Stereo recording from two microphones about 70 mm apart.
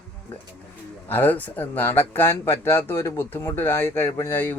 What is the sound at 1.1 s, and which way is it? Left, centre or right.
Speech, left.